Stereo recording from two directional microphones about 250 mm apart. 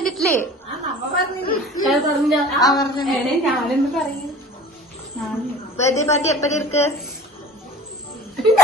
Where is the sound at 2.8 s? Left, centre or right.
Centre.